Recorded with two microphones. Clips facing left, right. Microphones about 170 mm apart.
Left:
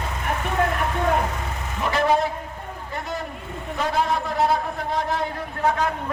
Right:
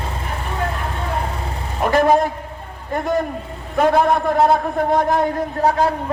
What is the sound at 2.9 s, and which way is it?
A man's voice, 50° right (ahead or behind).